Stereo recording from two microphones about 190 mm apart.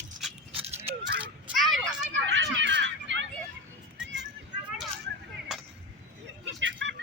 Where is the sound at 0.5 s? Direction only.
30° right (ahead or behind).